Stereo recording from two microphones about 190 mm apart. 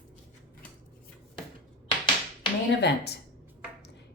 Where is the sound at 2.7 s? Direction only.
60° left (ahead or behind).